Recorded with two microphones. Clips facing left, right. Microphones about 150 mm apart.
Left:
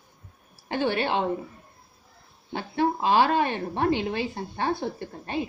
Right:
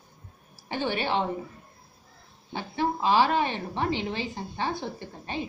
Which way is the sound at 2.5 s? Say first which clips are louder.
Left 3 dB; 55° left (ahead or behind).